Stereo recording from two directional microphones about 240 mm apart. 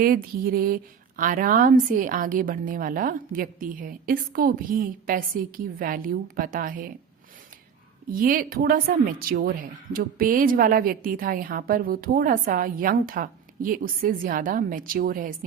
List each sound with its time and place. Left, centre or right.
0.0 s a woman's voice: right
8.1 s a woman's voice: right